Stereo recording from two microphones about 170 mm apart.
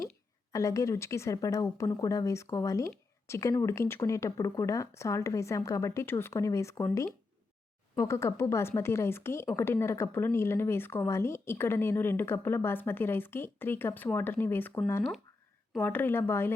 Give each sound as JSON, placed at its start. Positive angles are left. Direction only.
{"t": 0.5, "sound": "speech", "side_deg": 20}